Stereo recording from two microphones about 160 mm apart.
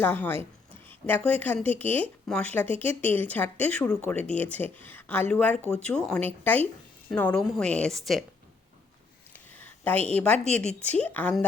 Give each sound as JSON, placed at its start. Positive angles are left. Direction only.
{"t": 0.0, "sound": "a woman's voice", "side_deg": 15}
{"t": 9.3, "sound": "a sound", "side_deg": 10}
{"t": 10.4, "sound": "a woman's voice", "side_deg": 5}